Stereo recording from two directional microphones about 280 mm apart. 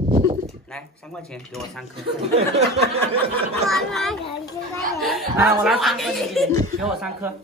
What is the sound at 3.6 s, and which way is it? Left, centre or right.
A child's voice, centre.